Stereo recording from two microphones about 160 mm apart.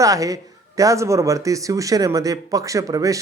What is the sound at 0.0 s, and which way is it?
Speech, 20° right (ahead or behind).